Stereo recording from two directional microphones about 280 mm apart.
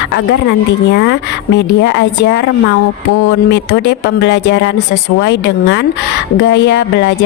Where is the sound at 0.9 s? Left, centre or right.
Left.